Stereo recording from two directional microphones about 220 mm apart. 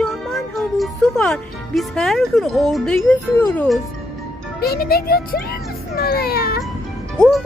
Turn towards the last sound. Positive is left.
turn(degrees=5)  # may be behind; listen again after turning